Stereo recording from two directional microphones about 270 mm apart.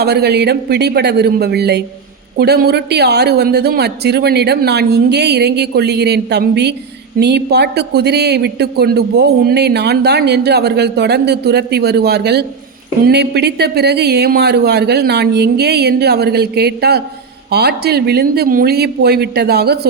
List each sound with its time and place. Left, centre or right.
0.0 s speech: right